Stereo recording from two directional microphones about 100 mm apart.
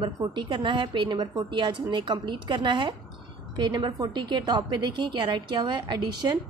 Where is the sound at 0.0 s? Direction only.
50° right (ahead or behind).